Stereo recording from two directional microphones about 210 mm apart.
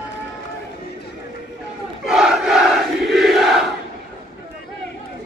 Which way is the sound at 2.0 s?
Centre (ahead or behind).